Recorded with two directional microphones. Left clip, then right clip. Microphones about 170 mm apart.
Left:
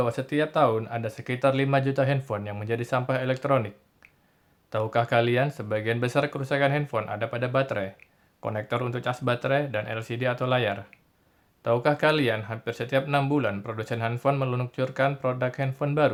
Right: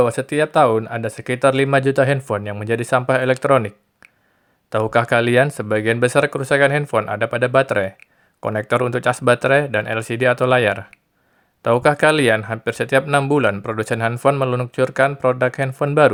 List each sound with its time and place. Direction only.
0.0 s speech: 40° right (ahead or behind)
4.7 s speech: 45° right (ahead or behind)